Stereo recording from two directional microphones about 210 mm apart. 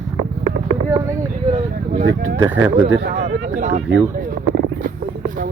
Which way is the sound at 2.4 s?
10° right (ahead or behind).